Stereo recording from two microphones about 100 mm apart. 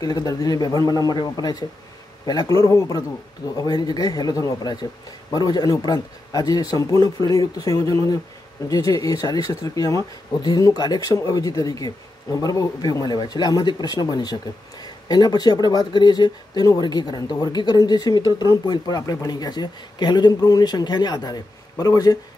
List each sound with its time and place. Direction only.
0.0 s speech: 40° left (ahead or behind)